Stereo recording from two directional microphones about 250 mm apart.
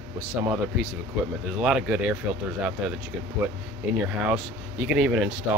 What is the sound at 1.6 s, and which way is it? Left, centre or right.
Speech, centre.